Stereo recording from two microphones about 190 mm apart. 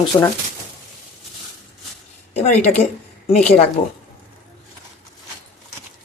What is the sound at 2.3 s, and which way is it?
Speech, 35° left (ahead or behind).